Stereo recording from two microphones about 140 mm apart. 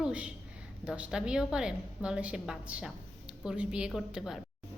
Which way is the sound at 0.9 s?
5° right (ahead or behind).